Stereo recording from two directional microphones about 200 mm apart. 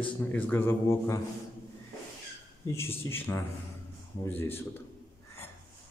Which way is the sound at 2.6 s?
10° left (ahead or behind).